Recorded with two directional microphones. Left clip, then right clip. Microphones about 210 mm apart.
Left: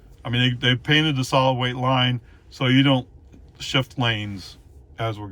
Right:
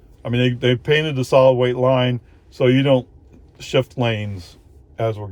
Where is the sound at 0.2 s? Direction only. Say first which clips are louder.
Right 3 dB; 30° right (ahead or behind).